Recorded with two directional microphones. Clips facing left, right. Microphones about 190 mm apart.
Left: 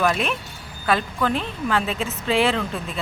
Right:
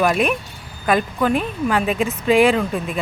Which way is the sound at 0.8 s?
15° right (ahead or behind).